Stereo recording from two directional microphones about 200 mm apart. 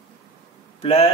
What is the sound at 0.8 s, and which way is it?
Speech, 30° left (ahead or behind).